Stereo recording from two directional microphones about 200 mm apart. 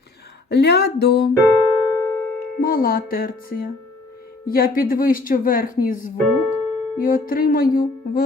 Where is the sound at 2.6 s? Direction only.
45° left (ahead or behind).